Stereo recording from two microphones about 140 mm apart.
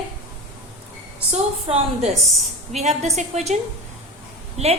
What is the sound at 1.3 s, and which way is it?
A woman's voice, 45° right (ahead or behind).